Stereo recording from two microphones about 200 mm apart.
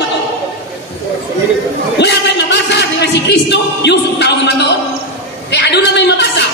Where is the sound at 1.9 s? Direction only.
60° left (ahead or behind).